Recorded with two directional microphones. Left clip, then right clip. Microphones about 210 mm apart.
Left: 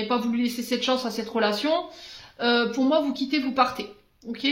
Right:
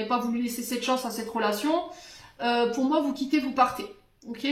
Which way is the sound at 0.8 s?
45° left (ahead or behind).